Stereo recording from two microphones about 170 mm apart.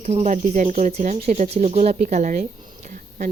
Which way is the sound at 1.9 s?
50° right (ahead or behind).